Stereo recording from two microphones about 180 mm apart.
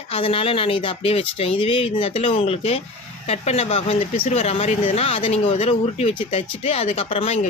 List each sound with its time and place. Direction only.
0.1 s speech: 30° left (ahead or behind)